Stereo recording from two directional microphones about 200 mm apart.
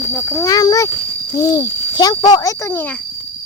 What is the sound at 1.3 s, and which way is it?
Speech, 15° left (ahead or behind).